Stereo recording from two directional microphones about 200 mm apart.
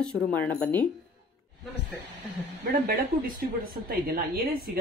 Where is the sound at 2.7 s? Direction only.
45° right (ahead or behind).